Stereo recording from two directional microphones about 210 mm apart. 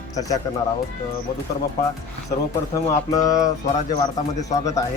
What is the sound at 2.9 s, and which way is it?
Speech, 15° left (ahead or behind).